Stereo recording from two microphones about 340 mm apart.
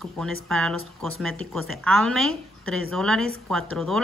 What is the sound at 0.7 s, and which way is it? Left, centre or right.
Speech, right.